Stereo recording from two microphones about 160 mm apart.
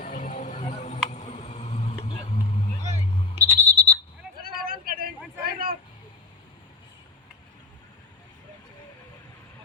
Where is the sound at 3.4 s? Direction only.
45° right (ahead or behind).